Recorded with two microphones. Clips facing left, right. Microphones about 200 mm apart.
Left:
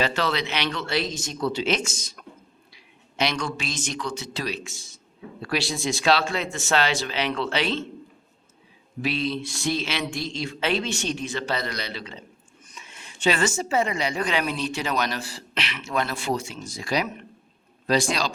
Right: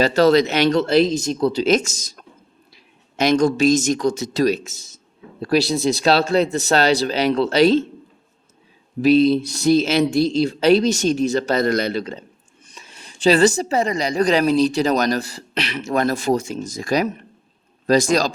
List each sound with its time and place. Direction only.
0.0 s a woman's voice: 40° right (ahead or behind)
9.0 s a woman's voice: 40° right (ahead or behind)